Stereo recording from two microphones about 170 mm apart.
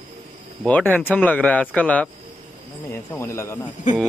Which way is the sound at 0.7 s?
10° left (ahead or behind).